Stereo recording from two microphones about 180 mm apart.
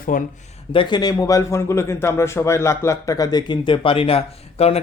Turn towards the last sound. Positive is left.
turn(degrees=35)  # may be behind; listen again after turning